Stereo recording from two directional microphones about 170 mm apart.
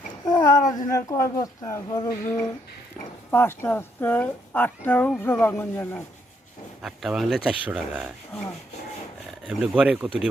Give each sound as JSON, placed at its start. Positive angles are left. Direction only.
{"t": 0.6, "sound": "speech", "side_deg": 50}
{"t": 0.9, "sound": "speech", "side_deg": 20}
{"t": 6.8, "sound": "speech", "side_deg": 0}
{"t": 9.5, "sound": "speech", "side_deg": -5}